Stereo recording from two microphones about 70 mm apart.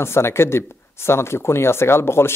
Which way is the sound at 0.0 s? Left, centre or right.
Left.